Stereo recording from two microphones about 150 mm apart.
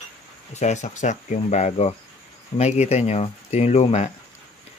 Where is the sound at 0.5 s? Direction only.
50° left (ahead or behind).